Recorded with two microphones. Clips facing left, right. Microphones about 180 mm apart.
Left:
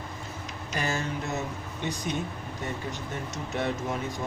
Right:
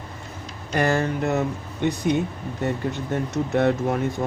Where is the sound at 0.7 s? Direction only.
60° right (ahead or behind).